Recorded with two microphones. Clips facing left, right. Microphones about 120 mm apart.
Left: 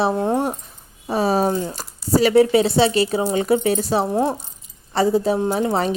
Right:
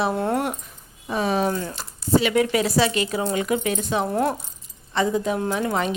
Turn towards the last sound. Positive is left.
turn(degrees=30)  # may be behind; listen again after turning